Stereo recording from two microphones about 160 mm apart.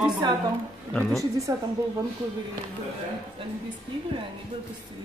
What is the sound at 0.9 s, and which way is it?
Speech, 5° left (ahead or behind).